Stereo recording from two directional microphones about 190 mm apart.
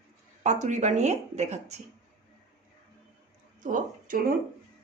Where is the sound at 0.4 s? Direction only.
40° right (ahead or behind).